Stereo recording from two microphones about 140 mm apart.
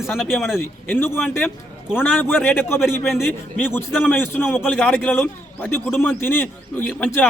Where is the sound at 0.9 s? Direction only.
15° left (ahead or behind).